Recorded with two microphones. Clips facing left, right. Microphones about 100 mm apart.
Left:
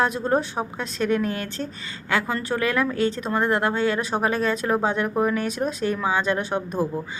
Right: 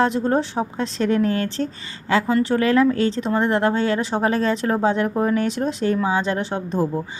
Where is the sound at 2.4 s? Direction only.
30° right (ahead or behind).